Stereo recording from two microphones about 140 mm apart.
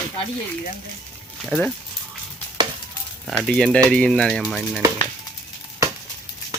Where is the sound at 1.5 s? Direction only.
10° left (ahead or behind).